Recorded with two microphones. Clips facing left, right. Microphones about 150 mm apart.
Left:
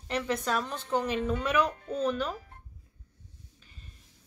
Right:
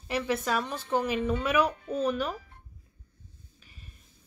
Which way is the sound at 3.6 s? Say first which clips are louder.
Right 2 dB; 10° right (ahead or behind).